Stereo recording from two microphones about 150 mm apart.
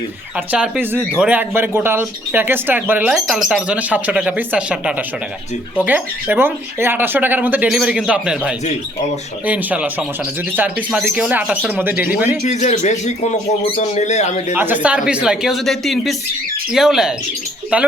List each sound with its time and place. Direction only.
0.3 s speech: 10° right (ahead or behind)
12.4 s speech: 50° left (ahead or behind)
14.5 s speech: 10° right (ahead or behind)